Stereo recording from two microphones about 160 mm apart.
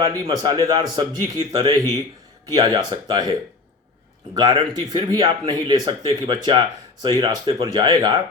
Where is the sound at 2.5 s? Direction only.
30° right (ahead or behind).